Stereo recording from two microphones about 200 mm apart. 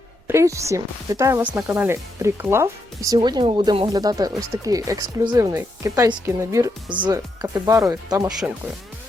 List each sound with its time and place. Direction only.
0.3 s speech: 15° right (ahead or behind)
8.4 s speech: 5° right (ahead or behind)